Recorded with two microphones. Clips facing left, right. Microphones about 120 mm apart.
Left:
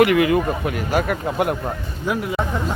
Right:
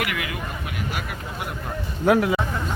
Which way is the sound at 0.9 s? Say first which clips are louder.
Left 12 dB; 55° left (ahead or behind).